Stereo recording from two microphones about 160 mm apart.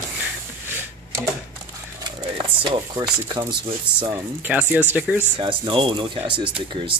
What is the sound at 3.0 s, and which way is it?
Speech, 10° right (ahead or behind).